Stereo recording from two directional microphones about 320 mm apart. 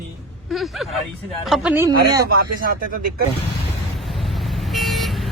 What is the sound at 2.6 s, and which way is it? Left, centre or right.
Speech, right.